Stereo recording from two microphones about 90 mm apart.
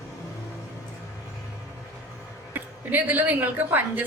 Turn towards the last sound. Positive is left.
turn(degrees=-20)  # may be behind; listen again after turning